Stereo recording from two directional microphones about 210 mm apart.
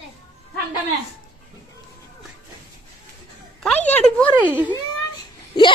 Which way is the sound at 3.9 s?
5° left (ahead or behind).